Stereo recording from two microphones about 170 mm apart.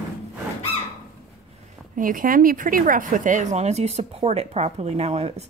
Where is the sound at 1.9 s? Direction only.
55° right (ahead or behind).